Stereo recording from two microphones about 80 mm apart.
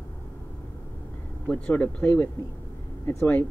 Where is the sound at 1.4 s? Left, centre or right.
Centre.